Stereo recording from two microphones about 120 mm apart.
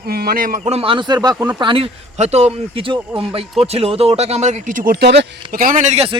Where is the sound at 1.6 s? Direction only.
45° right (ahead or behind); by 2.8 s 65° right (ahead or behind).